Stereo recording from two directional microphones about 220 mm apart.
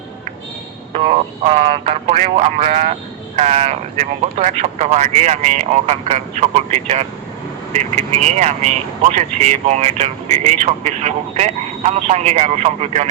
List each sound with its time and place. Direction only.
0.9 s speech: 25° right (ahead or behind)